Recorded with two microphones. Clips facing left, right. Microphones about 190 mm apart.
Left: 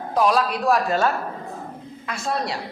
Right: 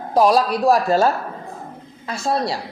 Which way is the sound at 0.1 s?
35° right (ahead or behind).